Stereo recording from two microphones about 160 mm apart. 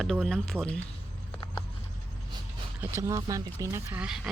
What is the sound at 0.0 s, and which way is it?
Speech, centre (ahead or behind).